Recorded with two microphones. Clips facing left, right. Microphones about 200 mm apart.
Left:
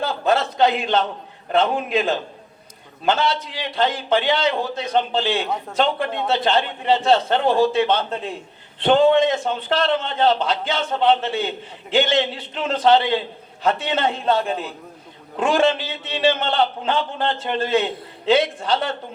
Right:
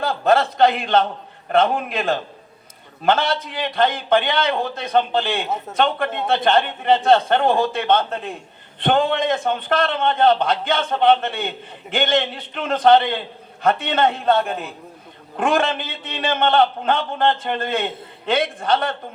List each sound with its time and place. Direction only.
0.3 s a man's voice: 55° right (ahead or behind)